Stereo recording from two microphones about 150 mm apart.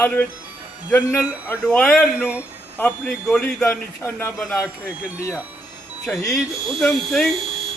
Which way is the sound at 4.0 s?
15° left (ahead or behind).